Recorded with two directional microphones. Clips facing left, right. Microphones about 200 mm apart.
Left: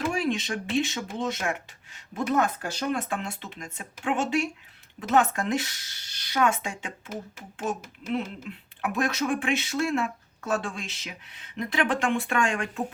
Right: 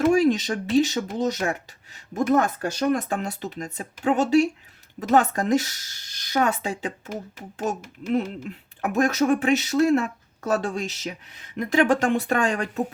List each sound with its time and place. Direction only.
0.1 s speech: 40° right (ahead or behind)